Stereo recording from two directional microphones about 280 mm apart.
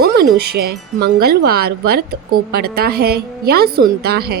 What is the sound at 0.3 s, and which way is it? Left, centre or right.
Speech, right.